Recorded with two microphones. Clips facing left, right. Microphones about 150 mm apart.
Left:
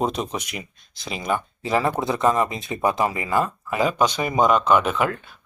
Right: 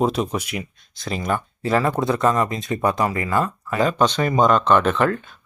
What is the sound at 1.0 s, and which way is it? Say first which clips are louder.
Speech: right 1 dB; 5° left (ahead or behind).